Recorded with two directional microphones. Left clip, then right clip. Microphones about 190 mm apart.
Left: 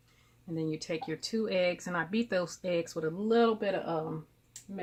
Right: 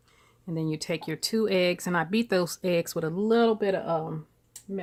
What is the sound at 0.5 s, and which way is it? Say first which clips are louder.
Speech: right 4 dB; 65° right (ahead or behind).